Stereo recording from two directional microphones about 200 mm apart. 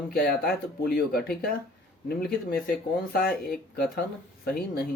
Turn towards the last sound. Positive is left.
turn(degrees=50)  # may be behind; listen again after turning